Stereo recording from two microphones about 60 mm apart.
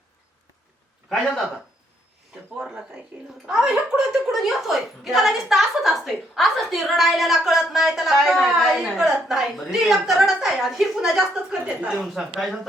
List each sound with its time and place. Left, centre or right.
1.1 s a woman's voice: centre
3.4 s a woman's voice: centre
11.6 s a woman's voice: right
11.9 s a woman's voice: centre